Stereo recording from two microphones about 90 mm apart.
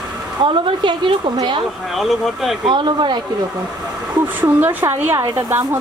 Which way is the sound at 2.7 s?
60° right (ahead or behind).